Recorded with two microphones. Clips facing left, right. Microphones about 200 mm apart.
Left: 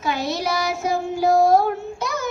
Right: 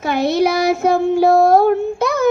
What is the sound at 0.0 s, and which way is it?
Child singing, 60° right (ahead or behind).